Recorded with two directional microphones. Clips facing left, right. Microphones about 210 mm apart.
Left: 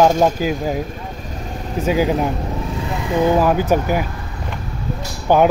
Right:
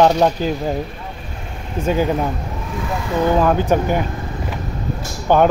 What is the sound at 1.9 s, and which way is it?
A man's voice, 10° left (ahead or behind).